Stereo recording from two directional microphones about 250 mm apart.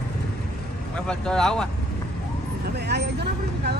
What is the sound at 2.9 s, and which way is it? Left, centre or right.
Speech, right.